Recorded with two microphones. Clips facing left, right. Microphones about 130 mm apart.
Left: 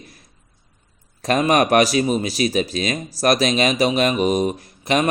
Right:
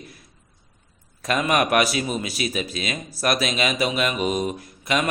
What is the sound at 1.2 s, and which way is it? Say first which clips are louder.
Speech: left 4 dB; 35° left (ahead or behind).